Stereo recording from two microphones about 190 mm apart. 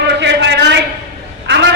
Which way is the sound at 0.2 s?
65° right (ahead or behind).